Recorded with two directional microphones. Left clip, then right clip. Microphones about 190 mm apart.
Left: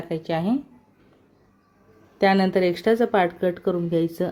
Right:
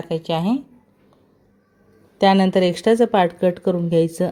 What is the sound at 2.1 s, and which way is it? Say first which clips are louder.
A woman's voice: right 4 dB; 20° right (ahead or behind).